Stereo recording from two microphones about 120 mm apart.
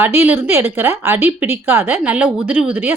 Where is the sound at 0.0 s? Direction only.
20° right (ahead or behind).